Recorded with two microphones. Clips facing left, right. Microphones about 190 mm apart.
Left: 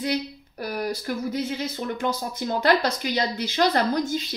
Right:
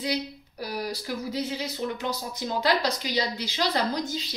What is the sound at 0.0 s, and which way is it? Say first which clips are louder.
Speech: left 3 dB; 55° left (ahead or behind).